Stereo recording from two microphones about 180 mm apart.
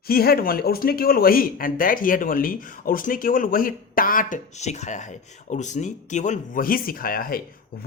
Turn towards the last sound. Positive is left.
turn(degrees=55)  # may be behind; listen again after turning